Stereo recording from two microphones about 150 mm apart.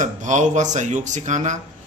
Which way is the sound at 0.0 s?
55° right (ahead or behind).